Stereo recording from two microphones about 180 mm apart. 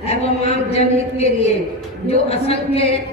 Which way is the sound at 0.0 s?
35° left (ahead or behind).